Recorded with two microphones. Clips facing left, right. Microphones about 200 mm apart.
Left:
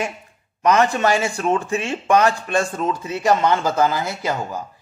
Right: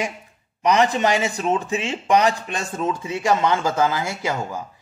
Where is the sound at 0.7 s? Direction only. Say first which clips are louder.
Left 1 dB; 15° right (ahead or behind).